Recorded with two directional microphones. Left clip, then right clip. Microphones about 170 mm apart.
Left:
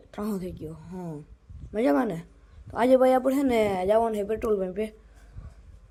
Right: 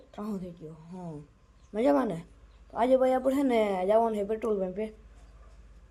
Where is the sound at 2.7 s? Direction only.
25° left (ahead or behind).